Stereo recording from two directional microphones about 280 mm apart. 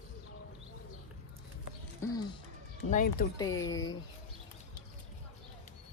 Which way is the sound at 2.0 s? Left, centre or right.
Centre.